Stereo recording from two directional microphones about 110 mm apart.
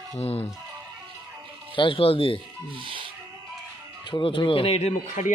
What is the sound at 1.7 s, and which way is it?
Speech, 50° left (ahead or behind).